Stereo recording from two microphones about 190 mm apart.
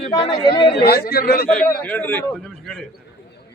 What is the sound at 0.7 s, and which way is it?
Speech, 60° left (ahead or behind).